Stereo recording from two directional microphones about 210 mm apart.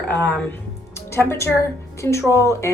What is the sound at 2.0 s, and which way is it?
Speech, 15° left (ahead or behind).